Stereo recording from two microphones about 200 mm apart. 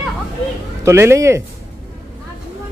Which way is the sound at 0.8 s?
15° right (ahead or behind).